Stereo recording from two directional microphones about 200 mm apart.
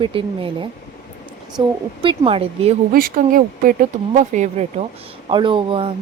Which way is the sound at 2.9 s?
45° right (ahead or behind).